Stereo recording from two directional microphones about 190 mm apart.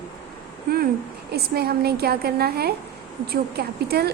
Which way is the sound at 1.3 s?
55° right (ahead or behind).